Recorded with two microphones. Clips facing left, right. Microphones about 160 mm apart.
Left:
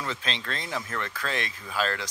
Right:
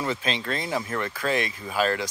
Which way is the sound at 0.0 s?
10° right (ahead or behind).